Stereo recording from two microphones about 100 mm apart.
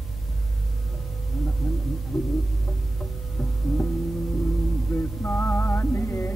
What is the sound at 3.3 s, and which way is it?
Music, 20° left (ahead or behind).